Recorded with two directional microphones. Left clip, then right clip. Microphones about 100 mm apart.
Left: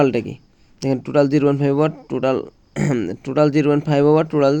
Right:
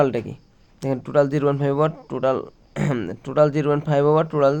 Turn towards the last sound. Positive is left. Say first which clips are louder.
# left 2 dB
turn(degrees=30)  # may be behind; listen again after turning